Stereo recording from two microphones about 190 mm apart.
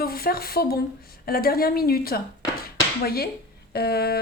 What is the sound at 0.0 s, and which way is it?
A woman's voice, 50° left (ahead or behind).